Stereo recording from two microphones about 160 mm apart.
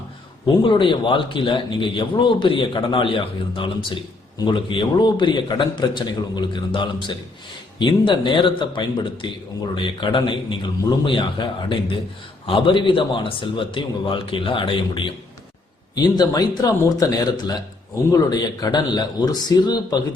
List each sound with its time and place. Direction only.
0.4 s a man's voice: 30° left (ahead or behind)